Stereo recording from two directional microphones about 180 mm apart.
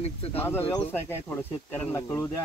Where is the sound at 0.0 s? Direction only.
35° left (ahead or behind).